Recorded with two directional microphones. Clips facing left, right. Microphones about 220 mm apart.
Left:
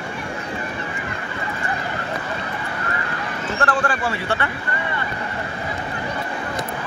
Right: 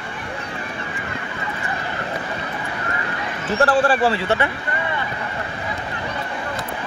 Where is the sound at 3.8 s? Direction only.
30° right (ahead or behind).